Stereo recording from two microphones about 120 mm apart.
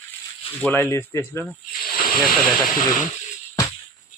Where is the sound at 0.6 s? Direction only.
15° left (ahead or behind).